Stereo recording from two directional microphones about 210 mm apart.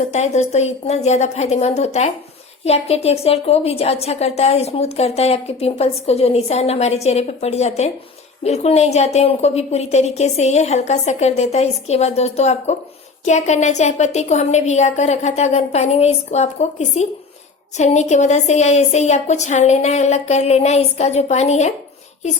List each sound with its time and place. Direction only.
0.1 s a woman's voice: 30° left (ahead or behind)